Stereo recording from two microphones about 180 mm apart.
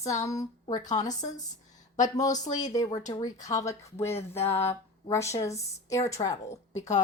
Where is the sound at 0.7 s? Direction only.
45° left (ahead or behind).